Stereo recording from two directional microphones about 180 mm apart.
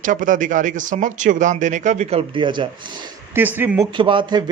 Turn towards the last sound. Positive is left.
turn(degrees=-25)  # may be behind; listen again after turning